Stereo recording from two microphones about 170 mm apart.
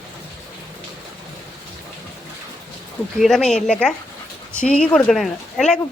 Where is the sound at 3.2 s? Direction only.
Centre (ahead or behind).